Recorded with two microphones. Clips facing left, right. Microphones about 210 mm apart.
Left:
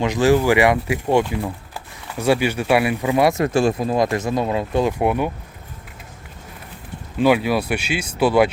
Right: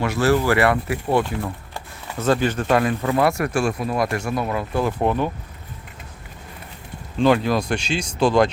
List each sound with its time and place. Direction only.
0.0 s speech: 15° left (ahead or behind)
7.2 s speech: 5° left (ahead or behind)